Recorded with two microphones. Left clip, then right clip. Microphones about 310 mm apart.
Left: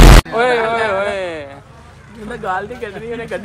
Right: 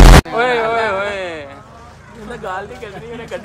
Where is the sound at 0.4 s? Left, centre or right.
Centre.